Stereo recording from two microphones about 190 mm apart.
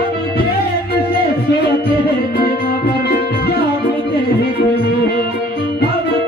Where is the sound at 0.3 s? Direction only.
55° left (ahead or behind).